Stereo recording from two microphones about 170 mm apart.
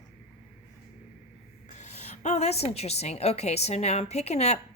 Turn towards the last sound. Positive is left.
turn(degrees=40)  # may be behind; listen again after turning